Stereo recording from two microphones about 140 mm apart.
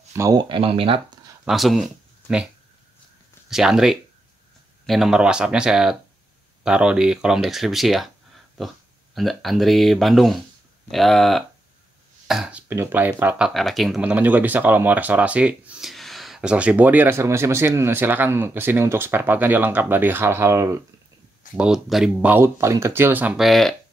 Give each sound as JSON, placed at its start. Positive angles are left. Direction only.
{"t": 0.1, "sound": "speech", "side_deg": -20}
{"t": 0.4, "sound": "speech", "side_deg": -40}
{"t": 1.4, "sound": "speech", "side_deg": 0}
{"t": 3.4, "sound": "speech", "side_deg": -5}
{"t": 13.5, "sound": "speech", "side_deg": 0}
{"t": 21.5, "sound": "speech", "side_deg": -5}